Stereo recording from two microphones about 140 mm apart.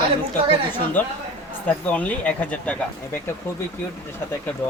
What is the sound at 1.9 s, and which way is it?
Speech, 10° left (ahead or behind).